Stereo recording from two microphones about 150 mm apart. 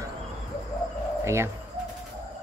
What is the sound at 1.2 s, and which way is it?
Speech, 20° right (ahead or behind).